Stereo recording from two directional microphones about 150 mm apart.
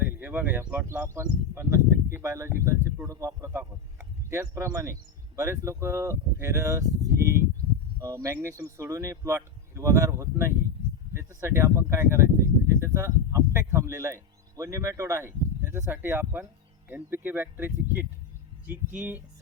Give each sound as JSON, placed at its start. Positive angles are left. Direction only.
{"t": 0.0, "sound": "speech", "side_deg": -10}
{"t": 8.0, "sound": "speech", "side_deg": -20}